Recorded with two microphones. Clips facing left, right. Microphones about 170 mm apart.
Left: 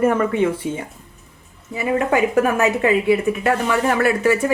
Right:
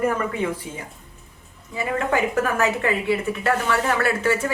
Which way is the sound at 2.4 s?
20° left (ahead or behind).